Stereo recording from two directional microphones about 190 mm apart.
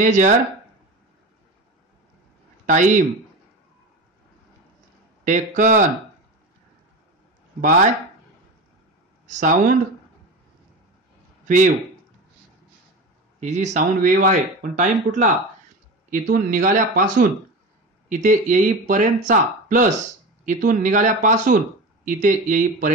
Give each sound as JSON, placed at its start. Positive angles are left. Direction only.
{"t": 0.0, "sound": "speech", "side_deg": -40}
{"t": 2.6, "sound": "a man's voice", "side_deg": -40}
{"t": 5.2, "sound": "speech", "side_deg": -40}
{"t": 9.3, "sound": "speech", "side_deg": -40}
{"t": 11.4, "sound": "speech", "side_deg": -40}
{"t": 13.4, "sound": "speech", "side_deg": -35}